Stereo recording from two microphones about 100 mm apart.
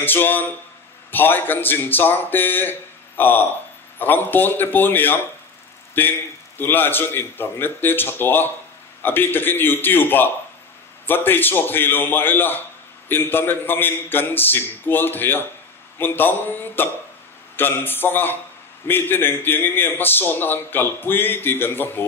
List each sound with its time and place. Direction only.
0.0 s a man's voice: 20° left (ahead or behind)